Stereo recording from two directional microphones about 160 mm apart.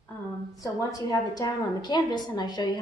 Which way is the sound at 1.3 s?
25° left (ahead or behind).